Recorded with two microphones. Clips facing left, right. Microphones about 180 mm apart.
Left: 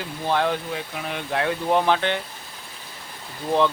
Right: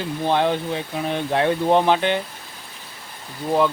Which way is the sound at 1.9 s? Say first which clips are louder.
Right 3 dB; 15° right (ahead or behind).